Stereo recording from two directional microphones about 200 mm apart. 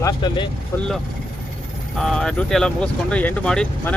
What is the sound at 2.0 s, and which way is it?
Speech, 5° left (ahead or behind).